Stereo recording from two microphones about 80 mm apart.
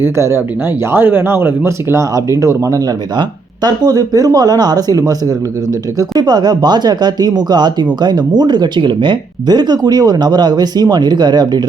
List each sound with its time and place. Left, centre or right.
0.0 s speech: right
3.2 s speech: right
6.0 s speech: right